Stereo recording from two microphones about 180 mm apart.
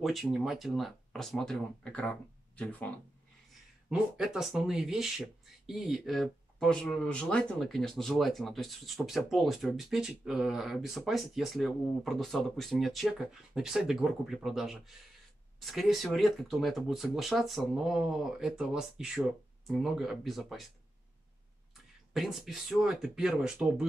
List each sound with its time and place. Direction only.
0.0 s speech: centre (ahead or behind)
3.9 s speech: 5° right (ahead or behind)
22.1 s speech: centre (ahead or behind)